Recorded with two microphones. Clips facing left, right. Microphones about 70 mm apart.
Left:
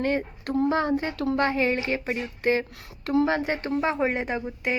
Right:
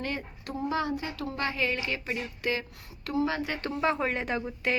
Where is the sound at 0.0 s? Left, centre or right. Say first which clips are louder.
Left 9 dB; left.